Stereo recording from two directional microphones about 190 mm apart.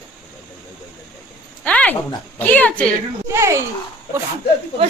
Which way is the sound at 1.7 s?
5° left (ahead or behind).